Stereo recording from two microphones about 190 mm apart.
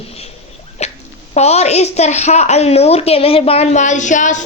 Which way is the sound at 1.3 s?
35° left (ahead or behind).